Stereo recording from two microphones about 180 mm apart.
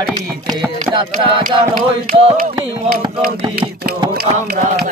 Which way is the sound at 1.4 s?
50° right (ahead or behind).